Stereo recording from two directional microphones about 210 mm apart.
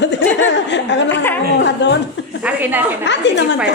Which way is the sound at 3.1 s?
55° left (ahead or behind).